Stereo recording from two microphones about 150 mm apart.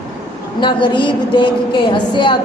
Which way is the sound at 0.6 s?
30° left (ahead or behind).